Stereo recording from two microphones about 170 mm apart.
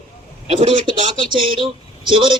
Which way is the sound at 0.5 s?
30° right (ahead or behind).